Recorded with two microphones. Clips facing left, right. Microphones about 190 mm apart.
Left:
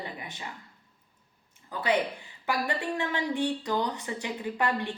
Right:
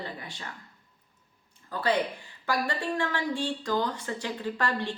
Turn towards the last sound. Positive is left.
turn(degrees=20)  # may be behind; listen again after turning